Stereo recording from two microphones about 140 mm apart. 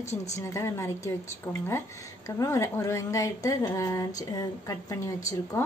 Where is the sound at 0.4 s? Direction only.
20° left (ahead or behind).